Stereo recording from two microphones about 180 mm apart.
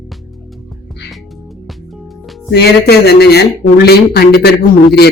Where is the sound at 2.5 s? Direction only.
65° left (ahead or behind).